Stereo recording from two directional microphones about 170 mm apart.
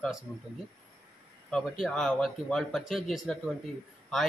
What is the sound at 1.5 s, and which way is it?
Speech, 5° left (ahead or behind).